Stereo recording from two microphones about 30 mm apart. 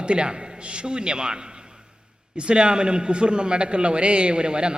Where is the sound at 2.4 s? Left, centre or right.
Right.